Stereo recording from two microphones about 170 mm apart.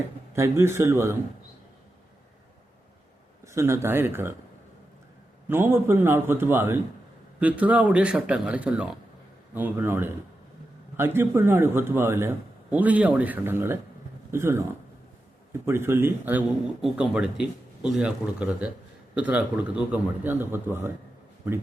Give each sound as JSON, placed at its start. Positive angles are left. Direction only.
{"t": 0.3, "sound": "a man's voice", "side_deg": -15}
{"t": 3.4, "sound": "a man's voice", "side_deg": -15}
{"t": 5.5, "sound": "a man's voice", "side_deg": -15}